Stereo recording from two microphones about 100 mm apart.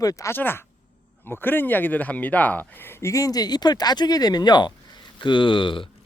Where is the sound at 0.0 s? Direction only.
35° left (ahead or behind).